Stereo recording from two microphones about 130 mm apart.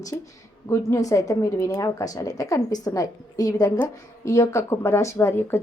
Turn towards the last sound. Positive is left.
turn(degrees=20)  # may be behind; listen again after turning